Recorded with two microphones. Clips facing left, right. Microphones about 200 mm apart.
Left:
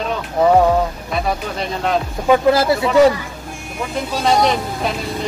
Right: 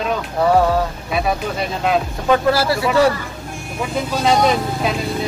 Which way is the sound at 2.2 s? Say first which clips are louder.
Left 3 dB; 15° left (ahead or behind).